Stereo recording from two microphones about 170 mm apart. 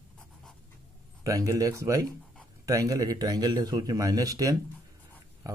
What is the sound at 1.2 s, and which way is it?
Speech, 20° right (ahead or behind).